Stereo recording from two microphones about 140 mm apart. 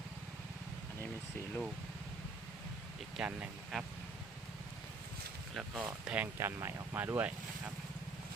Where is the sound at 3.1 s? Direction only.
5° right (ahead or behind).